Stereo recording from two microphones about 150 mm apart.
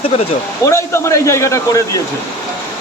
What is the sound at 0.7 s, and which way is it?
A man's voice, 20° left (ahead or behind).